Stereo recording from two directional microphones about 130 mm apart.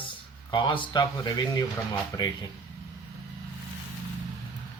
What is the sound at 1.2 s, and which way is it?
Speech, 25° left (ahead or behind).